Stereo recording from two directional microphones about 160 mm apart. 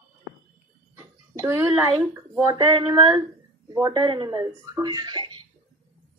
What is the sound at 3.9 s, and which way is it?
Speech, 30° right (ahead or behind).